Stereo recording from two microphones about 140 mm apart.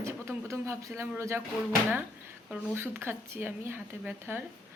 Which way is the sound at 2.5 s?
15° right (ahead or behind).